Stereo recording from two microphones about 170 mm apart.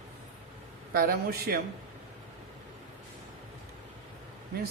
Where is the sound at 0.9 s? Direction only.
65° right (ahead or behind).